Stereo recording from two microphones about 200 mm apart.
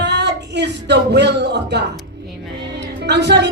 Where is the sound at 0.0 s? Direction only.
60° right (ahead or behind).